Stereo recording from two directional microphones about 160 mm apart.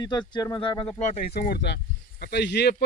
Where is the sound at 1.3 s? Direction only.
75° left (ahead or behind).